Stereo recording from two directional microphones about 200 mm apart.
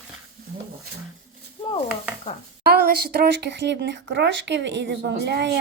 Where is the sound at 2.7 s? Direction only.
50° right (ahead or behind).